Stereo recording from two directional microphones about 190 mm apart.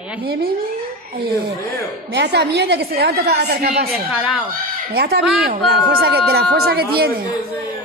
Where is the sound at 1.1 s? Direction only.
55° right (ahead or behind).